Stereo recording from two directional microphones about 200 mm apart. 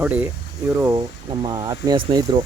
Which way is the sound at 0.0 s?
10° right (ahead or behind).